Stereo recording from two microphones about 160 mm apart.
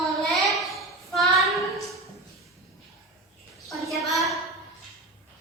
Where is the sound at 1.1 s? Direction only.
Centre (ahead or behind).